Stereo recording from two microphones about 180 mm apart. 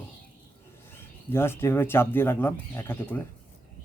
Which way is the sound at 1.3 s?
15° left (ahead or behind).